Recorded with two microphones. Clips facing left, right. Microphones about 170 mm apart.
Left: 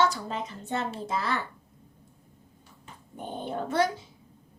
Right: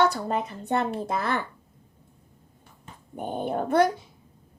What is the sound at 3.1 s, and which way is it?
Speech, 55° right (ahead or behind).